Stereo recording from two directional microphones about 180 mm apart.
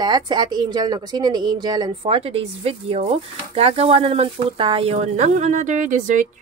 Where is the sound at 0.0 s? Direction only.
25° right (ahead or behind).